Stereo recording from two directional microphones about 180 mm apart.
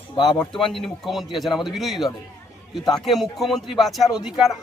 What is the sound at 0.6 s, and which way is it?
A man's voice, centre (ahead or behind).